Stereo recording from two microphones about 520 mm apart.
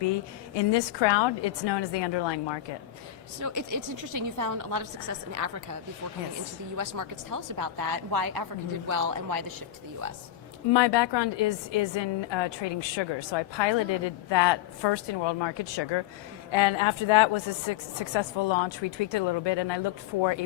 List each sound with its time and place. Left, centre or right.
0.0 s a woman's voice: left
3.4 s a woman's voice: right
6.7 s a woman's voice: right
10.7 s a woman's voice: left
16.5 s a woman's voice: left